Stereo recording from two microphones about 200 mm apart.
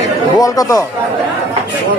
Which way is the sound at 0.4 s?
15° left (ahead or behind).